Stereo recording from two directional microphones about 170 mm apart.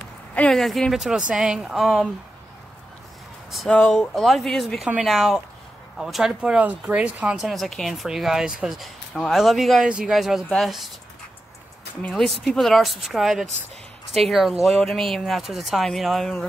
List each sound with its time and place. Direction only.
0.3 s speech: 5° left (ahead or behind)
3.5 s speech: 5° left (ahead or behind)
12.1 s speech: centre (ahead or behind)